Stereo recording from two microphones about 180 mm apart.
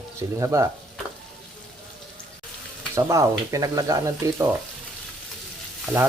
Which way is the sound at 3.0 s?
15° right (ahead or behind).